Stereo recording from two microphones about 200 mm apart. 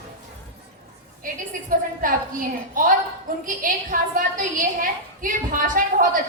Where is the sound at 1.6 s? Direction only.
40° right (ahead or behind).